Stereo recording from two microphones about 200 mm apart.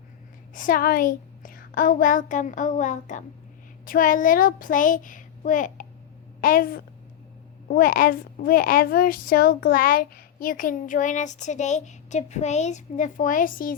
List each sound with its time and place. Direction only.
0.5 s a woman's voice: 45° left (ahead or behind)